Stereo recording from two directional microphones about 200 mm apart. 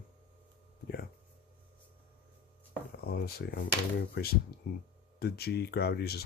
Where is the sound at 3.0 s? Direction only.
50° left (ahead or behind).